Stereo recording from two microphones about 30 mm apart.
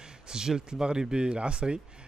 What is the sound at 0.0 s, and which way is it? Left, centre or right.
Speech, right.